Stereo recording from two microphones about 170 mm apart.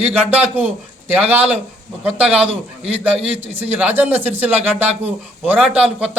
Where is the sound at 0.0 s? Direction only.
10° right (ahead or behind).